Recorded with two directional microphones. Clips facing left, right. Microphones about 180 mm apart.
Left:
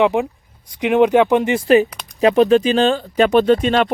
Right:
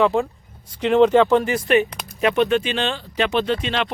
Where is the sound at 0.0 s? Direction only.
20° left (ahead or behind).